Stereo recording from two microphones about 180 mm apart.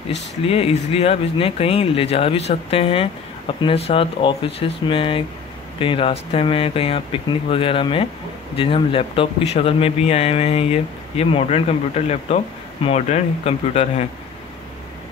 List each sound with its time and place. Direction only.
0.1 s speech: 35° left (ahead or behind)